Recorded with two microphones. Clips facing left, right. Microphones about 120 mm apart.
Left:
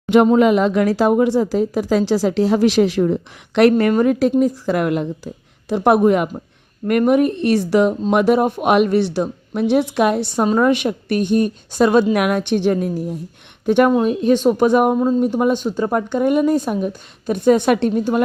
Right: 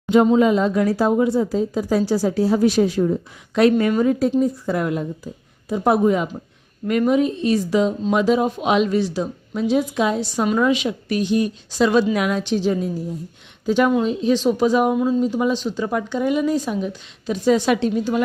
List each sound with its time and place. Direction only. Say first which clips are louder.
0.3 s a woman's voice: left 3 dB; 75° left (ahead or behind)
10.6 s speech: left 3 dB; 55° left (ahead or behind)
12.1 s speech: left 3 dB; 60° left (ahead or behind)